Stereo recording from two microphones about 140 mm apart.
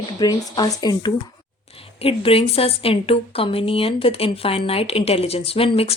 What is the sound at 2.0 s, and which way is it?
A woman's voice, 45° left (ahead or behind).